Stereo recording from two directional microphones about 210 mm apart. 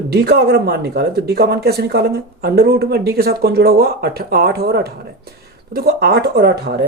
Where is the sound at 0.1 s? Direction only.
50° right (ahead or behind).